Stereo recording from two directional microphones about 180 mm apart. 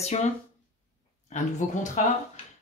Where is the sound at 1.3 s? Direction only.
40° left (ahead or behind).